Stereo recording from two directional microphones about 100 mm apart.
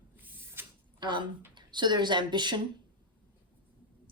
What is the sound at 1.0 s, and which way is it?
Speech, 50° right (ahead or behind).